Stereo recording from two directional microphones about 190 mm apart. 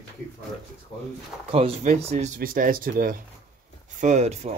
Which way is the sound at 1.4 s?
30° right (ahead or behind).